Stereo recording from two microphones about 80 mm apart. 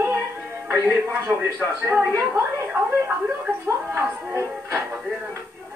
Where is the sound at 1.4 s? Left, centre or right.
Right.